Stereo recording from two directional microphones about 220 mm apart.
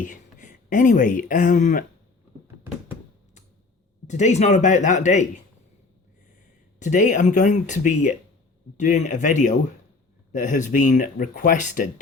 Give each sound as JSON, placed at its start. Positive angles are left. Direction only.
{"t": 0.0, "sound": "speech", "side_deg": 35}
{"t": 4.0, "sound": "speech", "side_deg": 30}
{"t": 6.7, "sound": "speech", "side_deg": 35}